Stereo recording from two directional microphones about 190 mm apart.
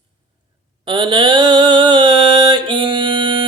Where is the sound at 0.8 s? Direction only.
25° right (ahead or behind).